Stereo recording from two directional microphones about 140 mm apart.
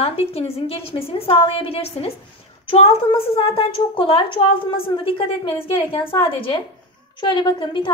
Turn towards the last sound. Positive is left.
turn(degrees=35)  # may be behind; listen again after turning